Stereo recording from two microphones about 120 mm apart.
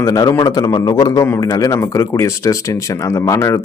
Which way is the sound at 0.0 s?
25° left (ahead or behind).